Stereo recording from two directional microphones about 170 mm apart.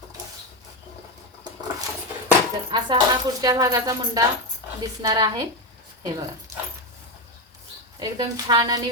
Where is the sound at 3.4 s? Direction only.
20° right (ahead or behind).